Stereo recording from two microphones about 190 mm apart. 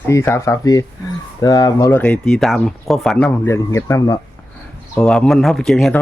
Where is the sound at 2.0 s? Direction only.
5° left (ahead or behind).